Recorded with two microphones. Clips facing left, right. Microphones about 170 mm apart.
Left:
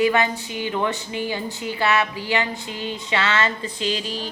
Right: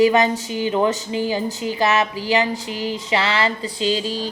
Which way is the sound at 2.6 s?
90° right.